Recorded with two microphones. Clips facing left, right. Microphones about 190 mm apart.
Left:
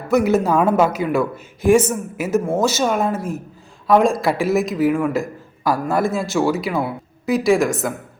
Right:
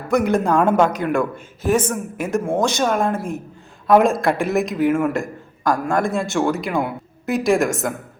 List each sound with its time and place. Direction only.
0.1 s a man's voice: 5° left (ahead or behind)